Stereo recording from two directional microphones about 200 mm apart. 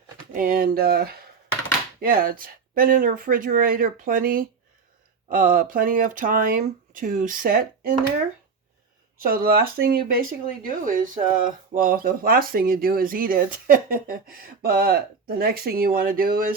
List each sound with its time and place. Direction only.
0.3 s speech: 45° right (ahead or behind)
9.1 s speech: 45° right (ahead or behind)